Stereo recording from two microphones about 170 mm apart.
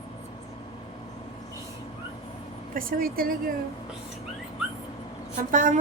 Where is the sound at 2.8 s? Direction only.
55° right (ahead or behind).